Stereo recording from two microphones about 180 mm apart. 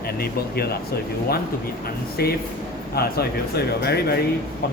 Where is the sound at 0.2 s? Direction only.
60° left (ahead or behind).